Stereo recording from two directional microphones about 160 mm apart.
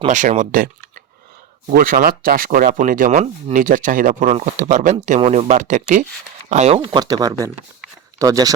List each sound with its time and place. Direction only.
0.1 s speech: 50° right (ahead or behind); by 8.5 s 20° right (ahead or behind)